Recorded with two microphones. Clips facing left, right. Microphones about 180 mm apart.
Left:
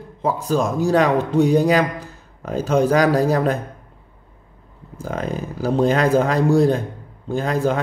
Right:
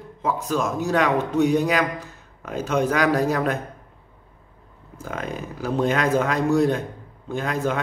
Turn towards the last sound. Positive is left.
turn(degrees=35)  # may be behind; listen again after turning